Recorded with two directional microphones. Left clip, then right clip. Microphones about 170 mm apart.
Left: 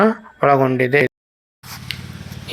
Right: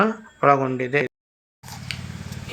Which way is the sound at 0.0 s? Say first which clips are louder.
Left 3 dB; 25° left (ahead or behind).